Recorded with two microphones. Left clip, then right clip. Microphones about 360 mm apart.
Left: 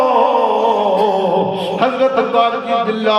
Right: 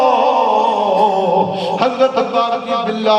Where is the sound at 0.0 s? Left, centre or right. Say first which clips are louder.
Even; right.